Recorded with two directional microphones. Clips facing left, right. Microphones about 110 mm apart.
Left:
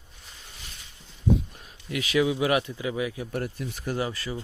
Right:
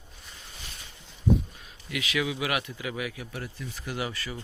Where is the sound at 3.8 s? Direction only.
30° left (ahead or behind).